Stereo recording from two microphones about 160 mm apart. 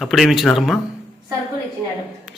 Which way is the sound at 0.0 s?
Centre (ahead or behind).